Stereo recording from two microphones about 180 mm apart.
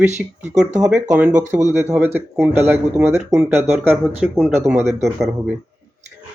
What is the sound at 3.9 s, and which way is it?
Speech, centre (ahead or behind).